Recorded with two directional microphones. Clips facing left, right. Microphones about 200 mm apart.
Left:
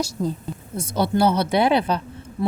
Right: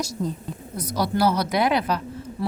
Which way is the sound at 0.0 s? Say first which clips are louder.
Left 3 dB; 30° left (ahead or behind).